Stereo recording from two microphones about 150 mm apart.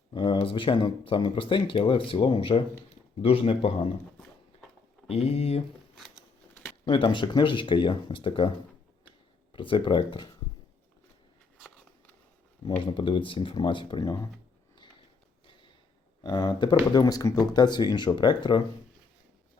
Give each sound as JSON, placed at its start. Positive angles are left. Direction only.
{"t": 0.1, "sound": "speech", "side_deg": 35}
{"t": 5.0, "sound": "speech", "side_deg": 45}
{"t": 6.8, "sound": "speech", "side_deg": 30}
{"t": 12.8, "sound": "speech", "side_deg": 35}
{"t": 16.2, "sound": "speech", "side_deg": 25}